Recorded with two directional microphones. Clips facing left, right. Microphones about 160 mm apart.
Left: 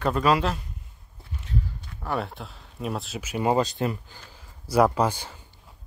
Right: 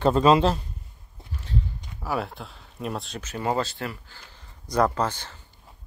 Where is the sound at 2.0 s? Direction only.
Centre (ahead or behind).